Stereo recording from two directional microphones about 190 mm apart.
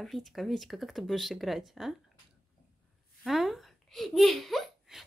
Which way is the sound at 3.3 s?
Centre (ahead or behind).